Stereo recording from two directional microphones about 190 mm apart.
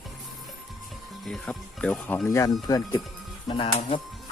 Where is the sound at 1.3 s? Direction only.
5° left (ahead or behind); by 4.0 s 35° left (ahead or behind).